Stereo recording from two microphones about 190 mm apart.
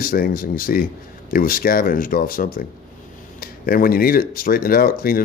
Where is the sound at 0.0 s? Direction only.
50° left (ahead or behind).